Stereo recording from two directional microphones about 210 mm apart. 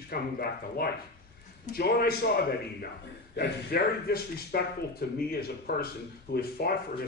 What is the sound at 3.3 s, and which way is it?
Speech, 50° left (ahead or behind).